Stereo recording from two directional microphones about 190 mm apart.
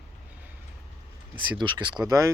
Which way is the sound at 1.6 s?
25° right (ahead or behind).